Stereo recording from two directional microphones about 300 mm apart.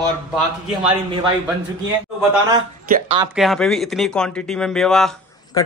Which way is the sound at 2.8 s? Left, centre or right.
Right.